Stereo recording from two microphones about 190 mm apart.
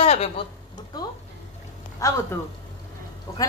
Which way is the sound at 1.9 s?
15° left (ahead or behind).